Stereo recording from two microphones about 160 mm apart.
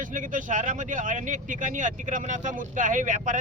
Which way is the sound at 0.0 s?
55° right (ahead or behind).